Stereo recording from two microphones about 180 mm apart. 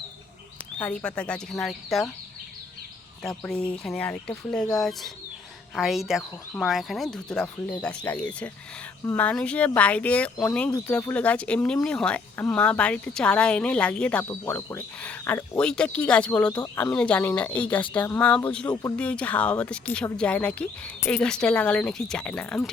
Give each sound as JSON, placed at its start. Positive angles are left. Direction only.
{"t": 0.8, "sound": "speech", "side_deg": 5}
{"t": 3.2, "sound": "speech", "side_deg": 5}
{"t": 18.7, "sound": "speech", "side_deg": 20}
{"t": 18.9, "sound": "speech", "side_deg": 5}